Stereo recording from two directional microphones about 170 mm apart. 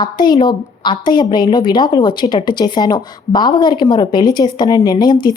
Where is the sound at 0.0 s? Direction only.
25° left (ahead or behind).